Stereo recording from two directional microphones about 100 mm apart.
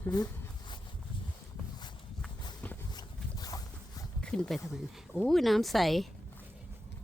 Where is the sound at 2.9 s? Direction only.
40° left (ahead or behind).